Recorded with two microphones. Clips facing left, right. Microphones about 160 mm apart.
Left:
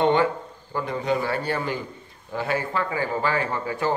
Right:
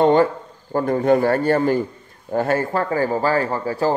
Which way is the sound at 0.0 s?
40° right (ahead or behind).